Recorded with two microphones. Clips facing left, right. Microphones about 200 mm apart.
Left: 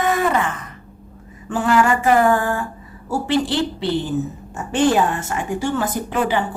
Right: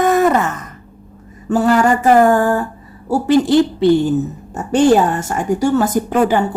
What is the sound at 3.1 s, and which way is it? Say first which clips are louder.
A woman's voice: right 8 dB; 45° right (ahead or behind).